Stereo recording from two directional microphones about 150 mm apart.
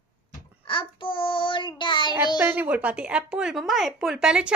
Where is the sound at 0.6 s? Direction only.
35° left (ahead or behind).